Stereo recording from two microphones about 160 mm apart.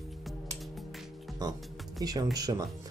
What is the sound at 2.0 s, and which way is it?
Speech, 25° right (ahead or behind).